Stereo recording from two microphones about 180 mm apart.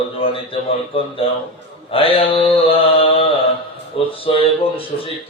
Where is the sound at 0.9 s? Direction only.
30° left (ahead or behind).